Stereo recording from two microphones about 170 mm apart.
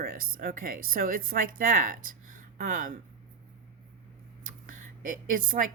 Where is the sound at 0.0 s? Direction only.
55° right (ahead or behind).